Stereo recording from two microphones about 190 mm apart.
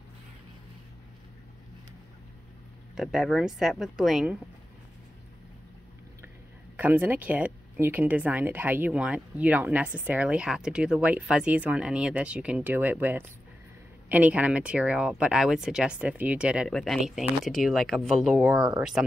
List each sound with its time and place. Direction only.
3.0 s speech: centre (ahead or behind)
6.8 s speech: 10° right (ahead or behind)